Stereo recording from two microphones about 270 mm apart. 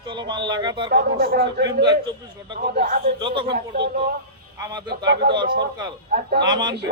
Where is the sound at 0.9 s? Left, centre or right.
Right.